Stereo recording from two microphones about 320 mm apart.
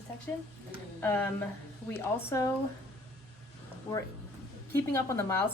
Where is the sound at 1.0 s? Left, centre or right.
Centre.